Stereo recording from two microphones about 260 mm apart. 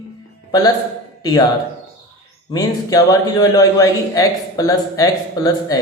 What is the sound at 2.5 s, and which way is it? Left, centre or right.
A man's voice, centre.